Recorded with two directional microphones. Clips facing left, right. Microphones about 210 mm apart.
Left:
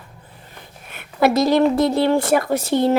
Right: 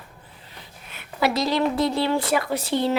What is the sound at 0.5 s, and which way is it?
Speech, 50° left (ahead or behind).